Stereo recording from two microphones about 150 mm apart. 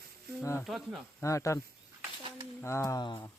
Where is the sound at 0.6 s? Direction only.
Centre (ahead or behind).